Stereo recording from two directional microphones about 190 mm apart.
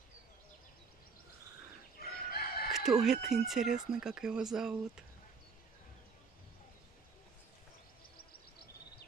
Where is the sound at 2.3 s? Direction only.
55° left (ahead or behind).